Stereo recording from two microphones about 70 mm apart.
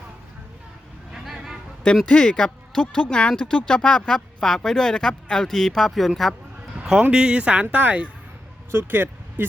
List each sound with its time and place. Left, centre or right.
1.1 s a sound: centre
2.0 s speech: centre
7.0 s speech: centre
8.7 s speech: right